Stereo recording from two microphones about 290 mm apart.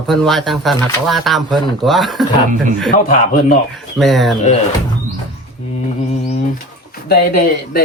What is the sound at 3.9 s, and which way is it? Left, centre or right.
Speech, centre.